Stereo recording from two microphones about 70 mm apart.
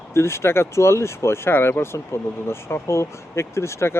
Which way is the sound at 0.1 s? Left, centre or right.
Left.